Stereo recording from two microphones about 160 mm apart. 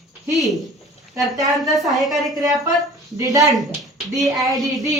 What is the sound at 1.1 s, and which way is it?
Speech, 20° right (ahead or behind).